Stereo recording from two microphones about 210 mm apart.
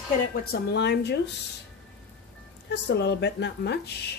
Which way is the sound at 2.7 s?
55° left (ahead or behind).